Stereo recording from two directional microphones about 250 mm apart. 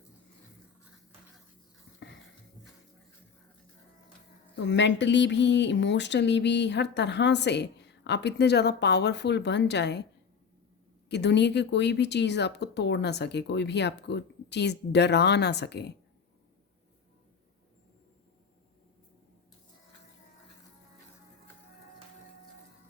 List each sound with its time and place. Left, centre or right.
4.5 s speech: left
11.1 s speech: left